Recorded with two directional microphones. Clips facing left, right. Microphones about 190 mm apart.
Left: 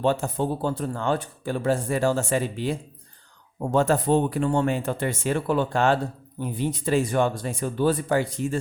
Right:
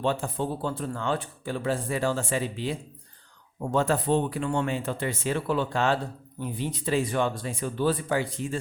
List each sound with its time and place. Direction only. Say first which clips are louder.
0.0 s speech: left 4 dB; 45° left (ahead or behind)